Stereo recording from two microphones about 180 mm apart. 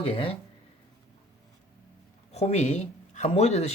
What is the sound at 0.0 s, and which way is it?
Speech, 30° left (ahead or behind).